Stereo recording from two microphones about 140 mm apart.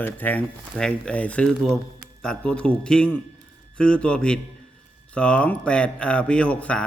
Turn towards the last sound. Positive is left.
turn(degrees=10)  # may be behind; listen again after turning